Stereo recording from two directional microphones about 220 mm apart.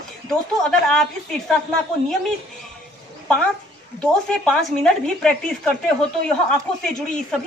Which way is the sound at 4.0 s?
5° left (ahead or behind).